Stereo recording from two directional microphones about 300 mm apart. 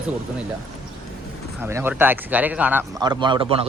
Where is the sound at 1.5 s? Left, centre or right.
Centre.